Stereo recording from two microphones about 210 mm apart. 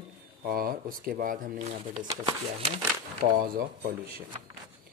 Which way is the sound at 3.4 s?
45° right (ahead or behind).